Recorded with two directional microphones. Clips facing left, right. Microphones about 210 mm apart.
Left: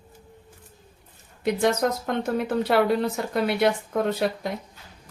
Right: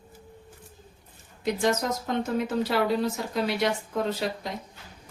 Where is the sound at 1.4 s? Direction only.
60° left (ahead or behind).